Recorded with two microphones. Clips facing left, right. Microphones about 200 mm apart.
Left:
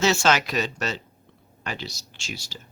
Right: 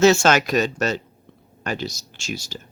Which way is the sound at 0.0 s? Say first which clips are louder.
Right 6 dB; 50° right (ahead or behind).